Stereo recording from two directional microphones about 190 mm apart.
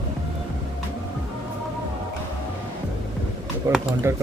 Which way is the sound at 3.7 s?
15° right (ahead or behind).